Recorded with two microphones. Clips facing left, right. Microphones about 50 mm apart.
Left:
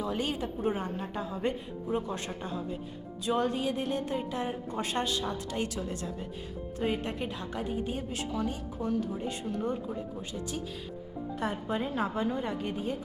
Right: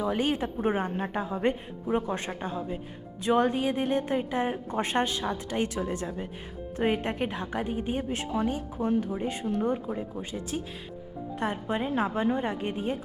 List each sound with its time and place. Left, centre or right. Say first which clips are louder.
0.0 s a woman's voice: right 5 dB; right
11.7 s a woman's voice: right 4 dB; centre; by 12.7 s right